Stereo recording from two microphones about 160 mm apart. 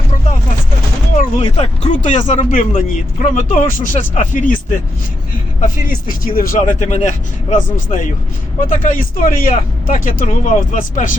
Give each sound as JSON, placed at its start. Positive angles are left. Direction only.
{"t": 1.4, "sound": "speech", "side_deg": 40}
{"t": 6.2, "sound": "speech", "side_deg": 60}